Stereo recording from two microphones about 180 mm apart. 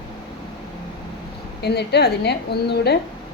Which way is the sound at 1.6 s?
65° left (ahead or behind).